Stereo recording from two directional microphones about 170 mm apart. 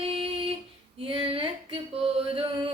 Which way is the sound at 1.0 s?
30° right (ahead or behind).